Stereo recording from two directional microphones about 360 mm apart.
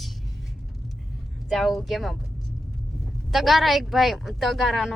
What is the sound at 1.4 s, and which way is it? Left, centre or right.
Speech, centre.